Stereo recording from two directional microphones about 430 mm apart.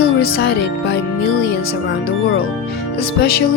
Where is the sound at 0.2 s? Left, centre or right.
Left.